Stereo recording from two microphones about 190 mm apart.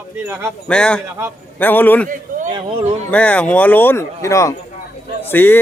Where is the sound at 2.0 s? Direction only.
45° right (ahead or behind).